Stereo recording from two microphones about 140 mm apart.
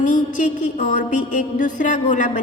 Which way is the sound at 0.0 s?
65° left (ahead or behind).